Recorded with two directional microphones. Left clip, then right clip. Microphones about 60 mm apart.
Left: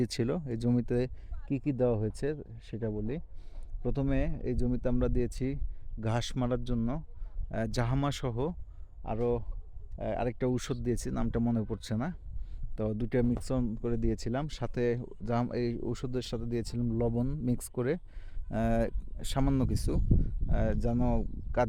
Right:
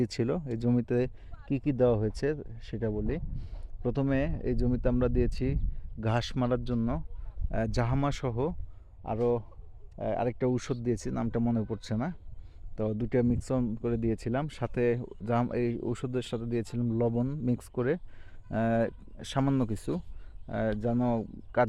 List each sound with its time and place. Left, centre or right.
0.0 s speech: left
10.0 s speech: left
19.7 s speech: left
20.1 s speech: left